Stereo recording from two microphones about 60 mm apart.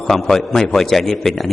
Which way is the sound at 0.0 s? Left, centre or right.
Centre.